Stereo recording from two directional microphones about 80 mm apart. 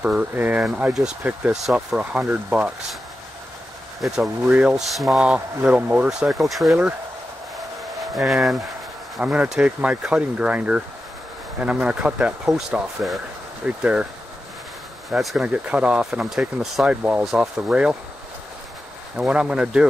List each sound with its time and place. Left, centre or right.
0.0 s speech: centre
1.5 s speech: centre
4.0 s speech: centre
4.5 s speech: centre
4.7 s speech: centre
5.2 s speech: centre
6.0 s speech: centre
8.0 s speech: centre
9.2 s speech: centre
15.0 s speech: centre
15.4 s speech: centre
16.8 s speech: centre
19.1 s speech: centre